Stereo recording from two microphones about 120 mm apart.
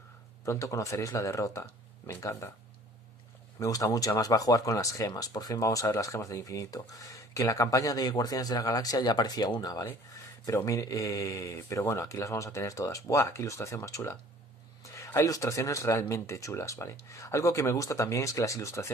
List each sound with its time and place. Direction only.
0.5 s speech: 25° left (ahead or behind)
3.5 s speech: 30° left (ahead or behind)
14.8 s a sound: 25° left (ahead or behind)
15.0 s speech: 25° left (ahead or behind)